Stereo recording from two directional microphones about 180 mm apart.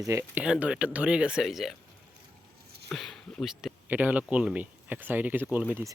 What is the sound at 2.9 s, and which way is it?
Speech, centre (ahead or behind).